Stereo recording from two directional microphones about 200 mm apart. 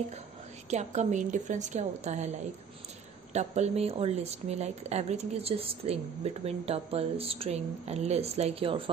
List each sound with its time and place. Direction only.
0.7 s speech: 35° right (ahead or behind)
3.3 s speech: 35° right (ahead or behind)